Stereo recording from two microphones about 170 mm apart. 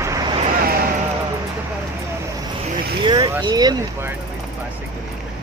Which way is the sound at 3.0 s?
25° right (ahead or behind).